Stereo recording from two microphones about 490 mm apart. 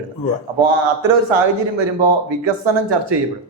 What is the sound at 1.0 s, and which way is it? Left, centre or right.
A man's voice, right.